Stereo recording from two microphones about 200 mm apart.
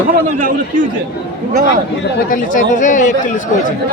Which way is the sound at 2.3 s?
40° left (ahead or behind).